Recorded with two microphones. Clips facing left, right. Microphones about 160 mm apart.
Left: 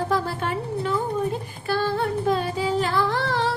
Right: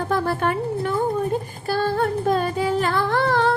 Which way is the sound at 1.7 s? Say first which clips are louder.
Right 2 dB; 45° right (ahead or behind).